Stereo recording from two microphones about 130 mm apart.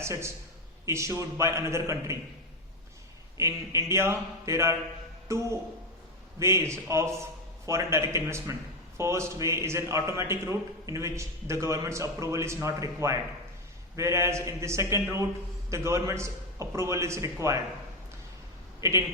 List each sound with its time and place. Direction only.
0.0 s a man's voice: 20° right (ahead or behind)
3.3 s a man's voice: 25° right (ahead or behind)
18.8 s a man's voice: 20° right (ahead or behind)